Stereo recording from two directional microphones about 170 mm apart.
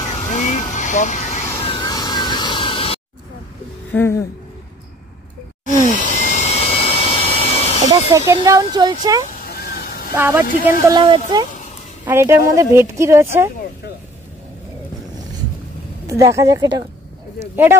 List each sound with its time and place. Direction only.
0.0 s vehicle: 40° left (ahead or behind)
1.6 s vehicle: 25° left (ahead or behind)
3.9 s music: 15° left (ahead or behind)
5.9 s vacuum cleaner: 45° left (ahead or behind)
7.9 s speech: 20° right (ahead or behind)
9.5 s vehicle: 65° left (ahead or behind)
10.1 s speech: 10° right (ahead or behind)
10.9 s speech: 25° right (ahead or behind)
12.0 s speech: 15° right (ahead or behind)
16.1 s speech: 20° right (ahead or behind)